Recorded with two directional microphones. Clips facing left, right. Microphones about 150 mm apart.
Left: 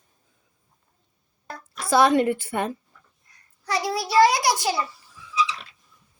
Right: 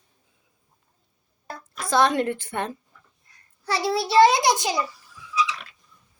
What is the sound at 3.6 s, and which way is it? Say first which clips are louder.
A child's voice: right 2 dB; 30° right (ahead or behind).